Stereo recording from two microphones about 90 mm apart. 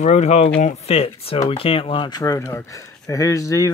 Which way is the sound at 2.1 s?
45° left (ahead or behind).